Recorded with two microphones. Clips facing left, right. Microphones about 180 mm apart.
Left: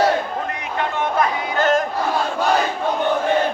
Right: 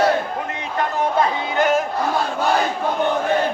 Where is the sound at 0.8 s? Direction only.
35° right (ahead or behind).